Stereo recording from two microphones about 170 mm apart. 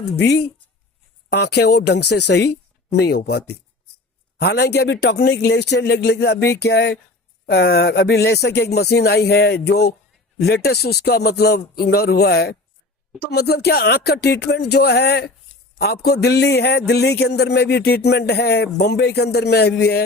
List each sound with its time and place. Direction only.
0.0 s speech: 80° left
3.2 s a man's voice: 70° left (ahead or behind)